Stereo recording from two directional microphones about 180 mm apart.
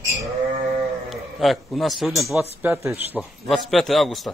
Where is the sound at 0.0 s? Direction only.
15° right (ahead or behind).